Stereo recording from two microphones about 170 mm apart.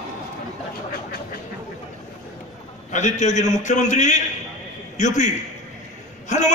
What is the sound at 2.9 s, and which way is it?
A woman's voice, 45° left (ahead or behind).